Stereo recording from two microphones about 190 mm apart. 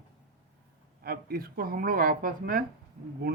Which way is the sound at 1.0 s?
55° right (ahead or behind).